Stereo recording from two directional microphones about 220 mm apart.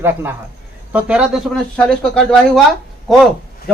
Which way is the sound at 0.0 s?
10° right (ahead or behind).